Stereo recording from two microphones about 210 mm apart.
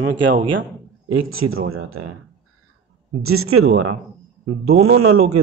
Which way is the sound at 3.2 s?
80° right.